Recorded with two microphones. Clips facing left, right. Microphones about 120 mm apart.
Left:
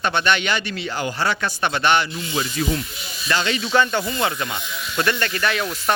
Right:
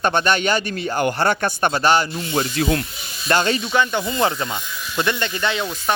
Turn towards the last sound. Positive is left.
turn(degrees=-25)  # may be behind; listen again after turning